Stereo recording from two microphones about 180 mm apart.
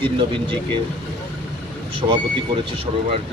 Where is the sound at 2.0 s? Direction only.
35° right (ahead or behind).